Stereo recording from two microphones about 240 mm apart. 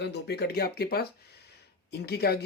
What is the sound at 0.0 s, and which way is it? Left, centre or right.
Speech, left.